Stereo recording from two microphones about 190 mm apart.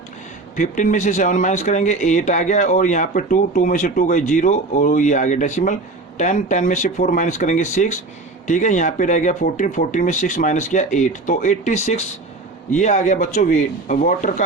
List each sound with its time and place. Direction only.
0.5 s speech: 40° left (ahead or behind)